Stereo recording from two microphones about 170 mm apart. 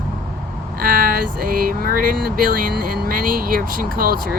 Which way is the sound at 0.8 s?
55° right (ahead or behind).